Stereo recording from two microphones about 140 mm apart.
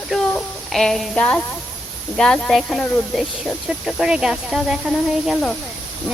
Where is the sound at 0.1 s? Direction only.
Centre (ahead or behind).